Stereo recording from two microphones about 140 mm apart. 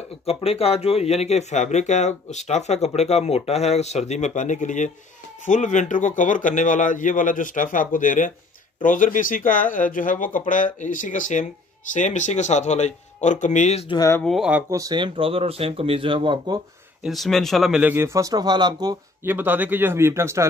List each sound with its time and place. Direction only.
0.2 s speech: 45° left (ahead or behind)
13.8 s speech: 25° left (ahead or behind)
14.2 s speech: centre (ahead or behind)
14.7 s speech: 25° right (ahead or behind)
17.0 s a man's voice: centre (ahead or behind); by 18.9 s 30° right (ahead or behind)
19.2 s a man's voice: 15° right (ahead or behind)